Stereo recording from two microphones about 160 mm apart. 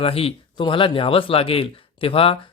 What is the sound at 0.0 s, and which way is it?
Speech, 35° left (ahead or behind).